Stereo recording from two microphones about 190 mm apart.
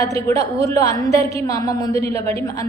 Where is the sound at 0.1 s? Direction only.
15° left (ahead or behind).